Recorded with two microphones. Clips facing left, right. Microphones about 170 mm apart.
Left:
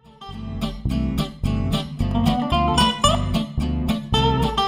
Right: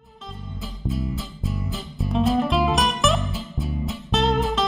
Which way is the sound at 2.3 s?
Centre (ahead or behind).